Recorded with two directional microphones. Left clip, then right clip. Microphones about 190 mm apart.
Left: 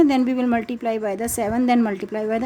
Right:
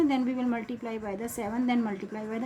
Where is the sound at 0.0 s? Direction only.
55° left (ahead or behind).